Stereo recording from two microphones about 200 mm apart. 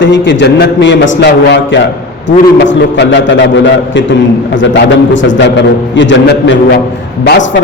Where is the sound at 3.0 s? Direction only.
60° left (ahead or behind).